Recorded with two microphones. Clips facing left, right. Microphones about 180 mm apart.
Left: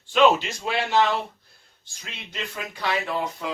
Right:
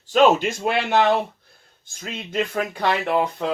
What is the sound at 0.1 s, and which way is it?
Speech, 45° right (ahead or behind).